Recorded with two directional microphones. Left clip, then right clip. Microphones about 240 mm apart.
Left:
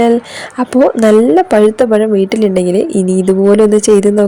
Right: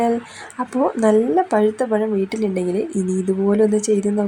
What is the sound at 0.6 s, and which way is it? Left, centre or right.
Speech, left.